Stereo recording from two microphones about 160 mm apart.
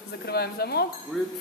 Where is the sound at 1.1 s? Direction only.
Centre (ahead or behind).